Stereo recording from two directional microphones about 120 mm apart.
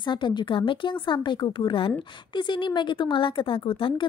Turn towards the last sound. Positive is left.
turn(degrees=45)  # may be behind; listen again after turning